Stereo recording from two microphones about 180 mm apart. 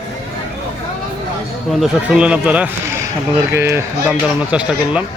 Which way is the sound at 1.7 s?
5° right (ahead or behind).